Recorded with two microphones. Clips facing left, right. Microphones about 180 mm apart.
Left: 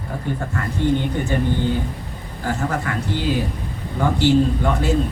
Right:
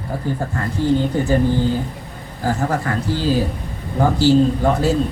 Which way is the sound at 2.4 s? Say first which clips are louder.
Right 3 dB; 35° right (ahead or behind).